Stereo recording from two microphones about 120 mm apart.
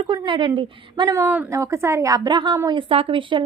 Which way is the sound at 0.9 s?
30° right (ahead or behind).